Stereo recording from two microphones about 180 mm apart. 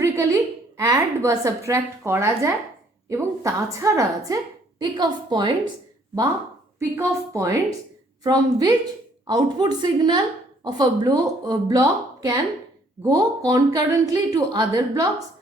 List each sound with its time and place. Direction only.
0.0 s a sound: 15° right (ahead or behind)
0.8 s a woman's voice: 20° right (ahead or behind)
6.7 s a woman's voice: 15° right (ahead or behind)